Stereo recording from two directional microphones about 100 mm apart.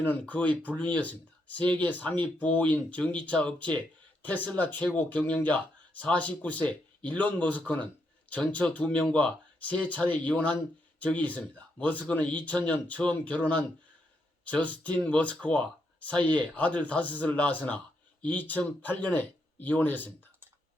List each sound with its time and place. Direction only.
0.0 s speech: 15° left (ahead or behind)